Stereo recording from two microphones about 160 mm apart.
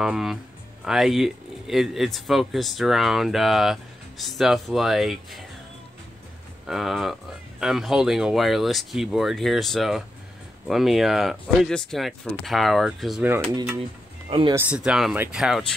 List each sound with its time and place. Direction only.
0.0 s speech: 5° right (ahead or behind)
6.6 s speech: centre (ahead or behind)
13.5 s speech: 25° right (ahead or behind)
14.5 s speech: 5° right (ahead or behind)